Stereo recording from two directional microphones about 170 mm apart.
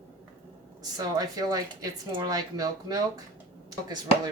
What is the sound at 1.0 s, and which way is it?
Speech, 25° right (ahead or behind).